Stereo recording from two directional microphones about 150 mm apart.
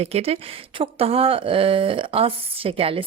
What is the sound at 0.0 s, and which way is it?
Speech, 40° right (ahead or behind).